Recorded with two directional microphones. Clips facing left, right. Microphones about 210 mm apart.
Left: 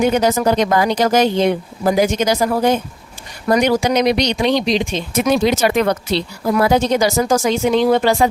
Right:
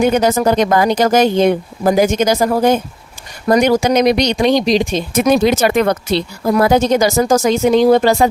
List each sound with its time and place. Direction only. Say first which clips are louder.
0.0 s speech: right 2 dB; 50° right (ahead or behind)